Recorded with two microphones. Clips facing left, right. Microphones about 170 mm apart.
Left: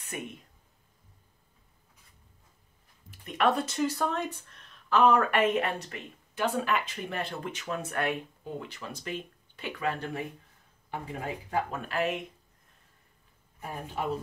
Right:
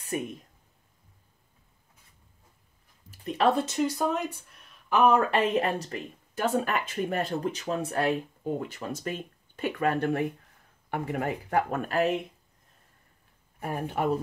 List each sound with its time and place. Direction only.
0.0 s speech: 35° right (ahead or behind)
3.1 s speech: 30° right (ahead or behind); by 4.9 s 10° right (ahead or behind)
4.9 s speech: 20° right (ahead or behind)
5.4 s speech: 35° right (ahead or behind)
8.5 s speech: 45° right (ahead or behind)
10.9 s speech: 70° right (ahead or behind); by 12.2 s 40° right (ahead or behind)
13.6 s speech: 65° right (ahead or behind)